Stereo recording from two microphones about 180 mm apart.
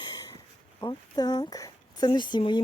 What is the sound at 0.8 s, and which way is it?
Speech, 25° left (ahead or behind).